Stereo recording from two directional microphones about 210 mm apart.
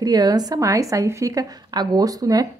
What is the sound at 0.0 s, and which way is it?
A woman's voice, 20° right (ahead or behind).